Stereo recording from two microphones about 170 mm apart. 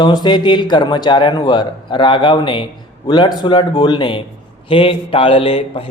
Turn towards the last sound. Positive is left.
turn(degrees=35)  # may be behind; listen again after turning